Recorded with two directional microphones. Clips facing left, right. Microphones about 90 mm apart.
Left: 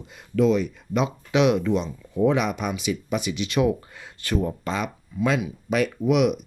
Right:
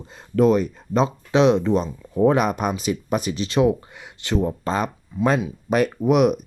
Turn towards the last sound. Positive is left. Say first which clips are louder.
# right 3 dB
turn(degrees=-40)  # may be behind; listen again after turning